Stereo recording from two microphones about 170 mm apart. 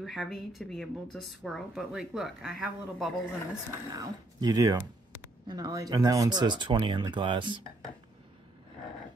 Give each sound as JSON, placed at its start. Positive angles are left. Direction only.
{"t": 0.0, "sound": "speech", "side_deg": 0}
{"t": 3.9, "sound": "speech", "side_deg": -20}